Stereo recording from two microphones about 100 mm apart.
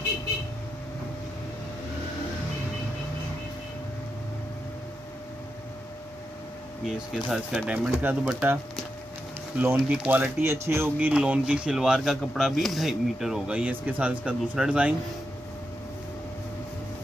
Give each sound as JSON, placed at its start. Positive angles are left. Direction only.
{"t": 6.9, "sound": "speech", "side_deg": -5}
{"t": 9.6, "sound": "speech", "side_deg": -15}